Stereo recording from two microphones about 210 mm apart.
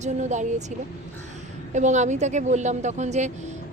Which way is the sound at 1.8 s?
35° right (ahead or behind).